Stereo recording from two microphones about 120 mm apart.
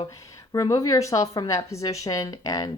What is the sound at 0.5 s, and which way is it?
A woman's voice, 30° left (ahead or behind).